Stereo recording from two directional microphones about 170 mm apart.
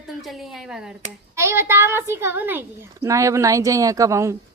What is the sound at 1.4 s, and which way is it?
A child's voice, 15° right (ahead or behind).